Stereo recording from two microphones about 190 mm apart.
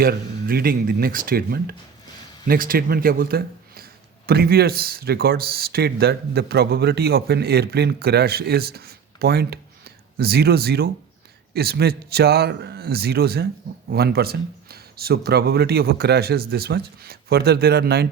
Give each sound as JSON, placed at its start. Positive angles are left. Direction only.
{"t": 0.0, "sound": "a man's voice", "side_deg": -55}